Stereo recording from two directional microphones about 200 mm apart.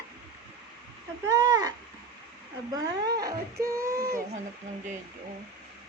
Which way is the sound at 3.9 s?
50° right (ahead or behind).